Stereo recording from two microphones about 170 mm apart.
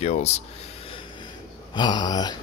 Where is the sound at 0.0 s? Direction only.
40° left (ahead or behind).